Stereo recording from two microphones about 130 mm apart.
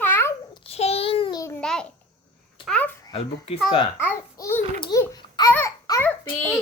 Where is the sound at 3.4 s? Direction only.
45° left (ahead or behind).